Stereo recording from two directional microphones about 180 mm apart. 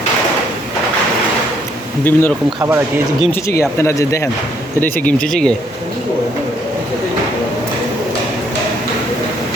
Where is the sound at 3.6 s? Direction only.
15° left (ahead or behind).